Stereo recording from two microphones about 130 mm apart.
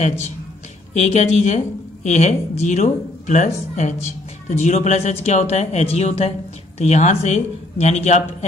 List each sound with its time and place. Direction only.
0.9 s speech: 60° left (ahead or behind)